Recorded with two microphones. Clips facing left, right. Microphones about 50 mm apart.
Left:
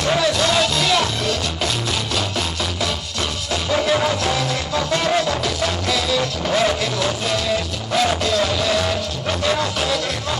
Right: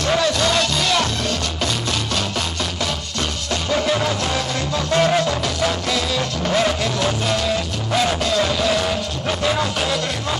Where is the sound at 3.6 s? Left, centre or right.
Centre.